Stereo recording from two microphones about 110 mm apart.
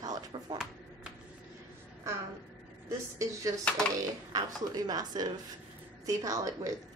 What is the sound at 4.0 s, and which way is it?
A woman's voice, 35° right (ahead or behind).